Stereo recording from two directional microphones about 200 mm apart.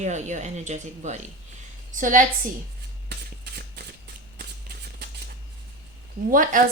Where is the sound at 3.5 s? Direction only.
55° right (ahead or behind).